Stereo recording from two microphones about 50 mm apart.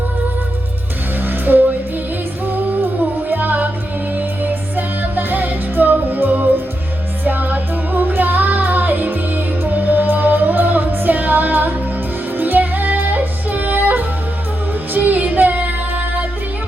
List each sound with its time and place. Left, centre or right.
1.3 s music: right
3.2 s music: right